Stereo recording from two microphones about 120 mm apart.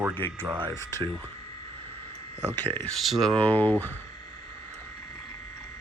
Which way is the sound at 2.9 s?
Centre (ahead or behind).